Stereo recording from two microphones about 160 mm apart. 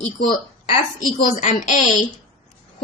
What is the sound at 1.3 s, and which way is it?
Speech, 50° left (ahead or behind).